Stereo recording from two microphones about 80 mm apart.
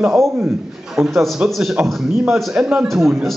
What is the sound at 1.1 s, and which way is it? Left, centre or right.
A man's voice, centre.